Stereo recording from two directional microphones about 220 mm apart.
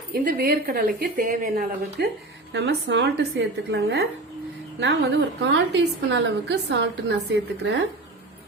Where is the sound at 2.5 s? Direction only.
55° right (ahead or behind).